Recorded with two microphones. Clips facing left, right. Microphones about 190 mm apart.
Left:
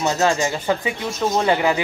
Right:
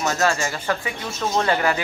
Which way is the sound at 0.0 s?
20° left (ahead or behind).